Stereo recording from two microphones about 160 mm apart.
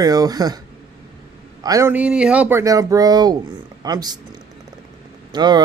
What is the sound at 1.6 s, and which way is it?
Speech, 20° right (ahead or behind).